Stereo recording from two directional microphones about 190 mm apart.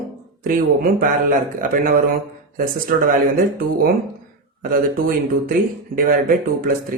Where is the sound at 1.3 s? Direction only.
45° right (ahead or behind).